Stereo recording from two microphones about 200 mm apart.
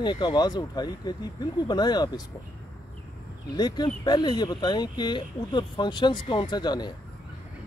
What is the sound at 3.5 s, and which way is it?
Speech, 20° left (ahead or behind).